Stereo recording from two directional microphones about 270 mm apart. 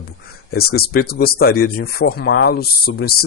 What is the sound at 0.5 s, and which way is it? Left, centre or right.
Speech, left.